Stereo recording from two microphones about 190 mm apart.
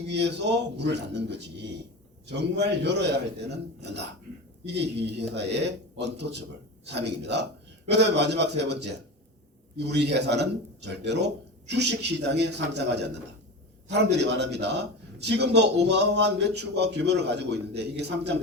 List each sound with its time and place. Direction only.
0.1 s a man's voice: 65° right (ahead or behind)